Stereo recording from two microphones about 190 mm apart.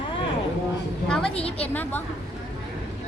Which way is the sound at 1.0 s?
5° left (ahead or behind).